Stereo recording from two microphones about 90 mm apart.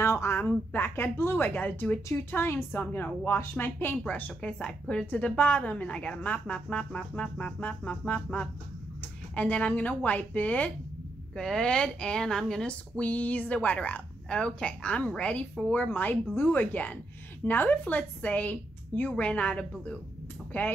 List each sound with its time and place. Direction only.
0.0 s a sound: 30° left (ahead or behind)
0.7 s a woman's voice: 25° left (ahead or behind)
11.3 s a woman's voice: 5° left (ahead or behind)